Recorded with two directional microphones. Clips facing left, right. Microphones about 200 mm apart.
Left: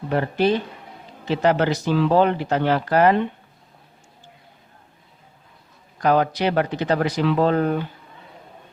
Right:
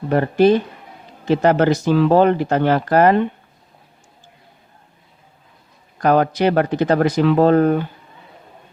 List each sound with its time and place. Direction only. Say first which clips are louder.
0.1 s speech: right 6 dB; 45° right (ahead or behind)
6.0 s speech: right 4 dB; 50° right (ahead or behind)